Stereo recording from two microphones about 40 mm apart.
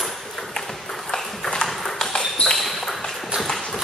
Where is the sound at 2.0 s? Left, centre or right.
Centre.